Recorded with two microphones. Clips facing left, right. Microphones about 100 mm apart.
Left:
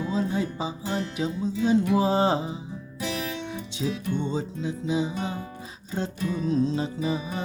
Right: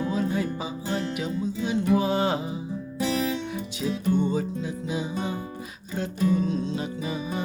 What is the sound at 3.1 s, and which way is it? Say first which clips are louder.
Music: right 5 dB; 35° right (ahead or behind).